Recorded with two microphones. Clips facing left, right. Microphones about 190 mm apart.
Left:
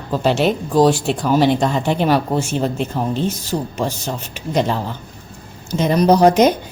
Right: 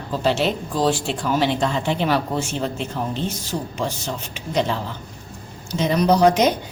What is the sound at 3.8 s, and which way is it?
Speech, 40° left (ahead or behind).